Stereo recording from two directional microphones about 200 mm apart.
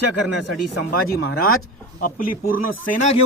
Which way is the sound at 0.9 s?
50° left (ahead or behind).